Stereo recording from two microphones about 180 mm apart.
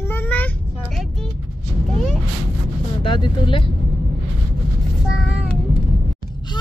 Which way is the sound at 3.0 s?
30° left (ahead or behind).